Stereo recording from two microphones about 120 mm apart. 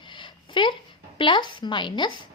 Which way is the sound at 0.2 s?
45° left (ahead or behind).